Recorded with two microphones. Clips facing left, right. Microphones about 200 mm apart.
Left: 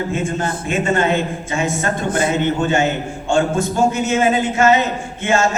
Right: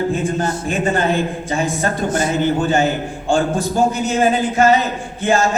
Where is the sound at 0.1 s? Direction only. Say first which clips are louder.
Right 2 dB; 35° right (ahead or behind).